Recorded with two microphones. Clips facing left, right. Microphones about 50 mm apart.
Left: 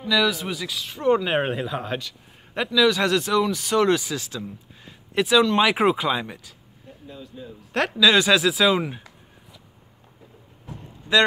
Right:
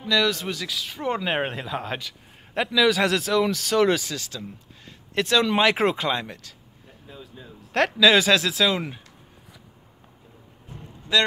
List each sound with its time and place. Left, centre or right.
0.1 s speech: centre
4.1 s speech: centre
4.8 s a sound: centre
5.6 s speech: centre
7.1 s speech: centre
11.1 s a man's voice: left